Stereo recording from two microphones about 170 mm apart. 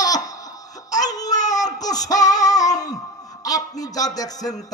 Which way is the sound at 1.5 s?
20° left (ahead or behind).